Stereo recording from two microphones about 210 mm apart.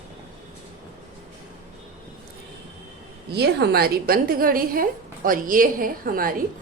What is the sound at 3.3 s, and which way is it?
A woman's voice, 50° right (ahead or behind).